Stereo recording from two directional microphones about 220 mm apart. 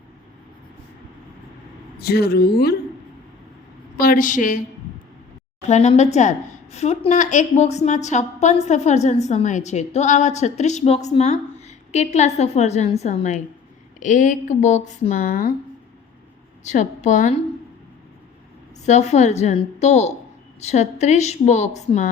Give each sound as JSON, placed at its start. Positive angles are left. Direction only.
{"t": 2.0, "sound": "speech", "side_deg": 45}
{"t": 3.9, "sound": "a woman's voice", "side_deg": 40}
{"t": 5.6, "sound": "a woman's voice", "side_deg": 30}
{"t": 16.6, "sound": "a woman's voice", "side_deg": 35}
{"t": 18.9, "sound": "a woman's voice", "side_deg": 30}